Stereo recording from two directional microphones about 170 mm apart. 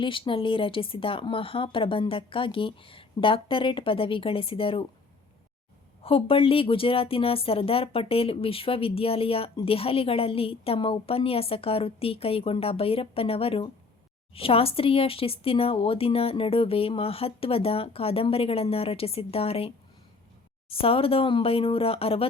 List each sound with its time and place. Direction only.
0.0 s a woman's voice: 30° left (ahead or behind)
6.0 s a woman's voice: 35° left (ahead or behind)